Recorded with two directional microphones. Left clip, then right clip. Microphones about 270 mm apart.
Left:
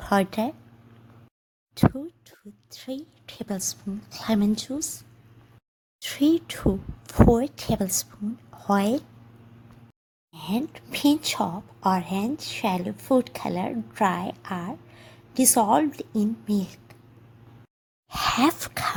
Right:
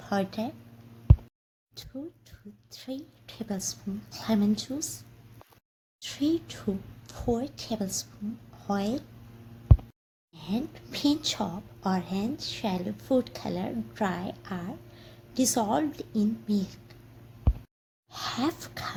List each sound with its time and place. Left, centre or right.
0.0 s speech: left
1.7 s a woman's voice: left
6.0 s a woman's voice: left
10.3 s a woman's voice: left
18.1 s a woman's voice: left